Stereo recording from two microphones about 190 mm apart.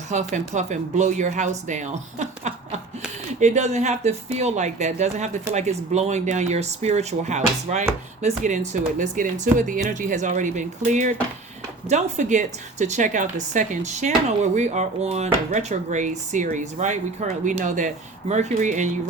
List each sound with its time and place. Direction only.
0.1 s speech: 35° right (ahead or behind)